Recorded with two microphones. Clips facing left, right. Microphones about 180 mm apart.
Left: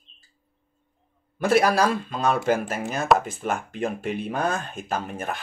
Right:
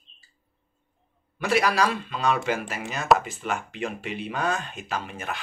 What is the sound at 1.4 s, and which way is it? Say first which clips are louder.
Speech: left 3 dB; 50° left (ahead or behind).